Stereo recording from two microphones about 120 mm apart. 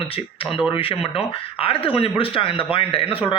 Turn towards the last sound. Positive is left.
turn(degrees=50)  # may be behind; listen again after turning